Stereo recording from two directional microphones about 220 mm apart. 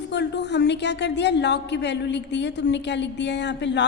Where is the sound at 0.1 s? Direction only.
50° left (ahead or behind).